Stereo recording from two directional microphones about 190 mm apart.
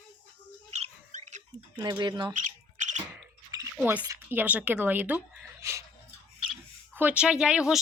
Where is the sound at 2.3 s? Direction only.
40° right (ahead or behind).